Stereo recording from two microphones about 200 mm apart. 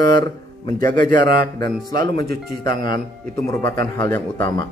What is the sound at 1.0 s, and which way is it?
Speech, 45° right (ahead or behind).